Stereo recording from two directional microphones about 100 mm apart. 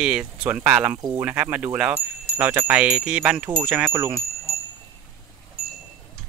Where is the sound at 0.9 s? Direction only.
45° right (ahead or behind).